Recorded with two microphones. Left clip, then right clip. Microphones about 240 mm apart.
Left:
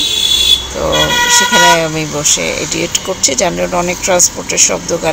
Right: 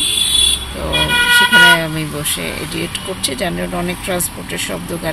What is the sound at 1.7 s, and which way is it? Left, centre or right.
Speech, centre.